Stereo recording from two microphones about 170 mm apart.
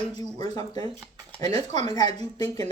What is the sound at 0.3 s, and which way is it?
Speech, 25° left (ahead or behind).